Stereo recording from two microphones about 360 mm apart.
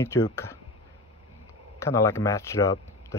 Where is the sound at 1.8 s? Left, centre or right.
Centre.